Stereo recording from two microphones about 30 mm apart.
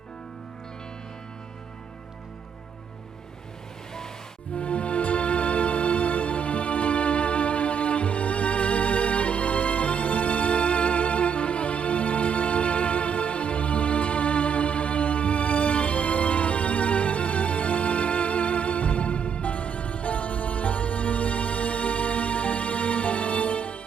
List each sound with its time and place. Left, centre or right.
4.5 s music: left